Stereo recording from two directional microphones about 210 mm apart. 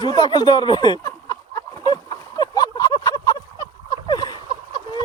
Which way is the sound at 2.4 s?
20° left (ahead or behind).